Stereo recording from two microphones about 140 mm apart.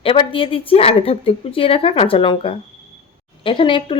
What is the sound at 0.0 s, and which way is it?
Speech, 40° left (ahead or behind).